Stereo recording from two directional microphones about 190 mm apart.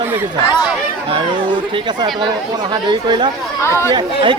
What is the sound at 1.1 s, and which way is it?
Speech, 25° right (ahead or behind).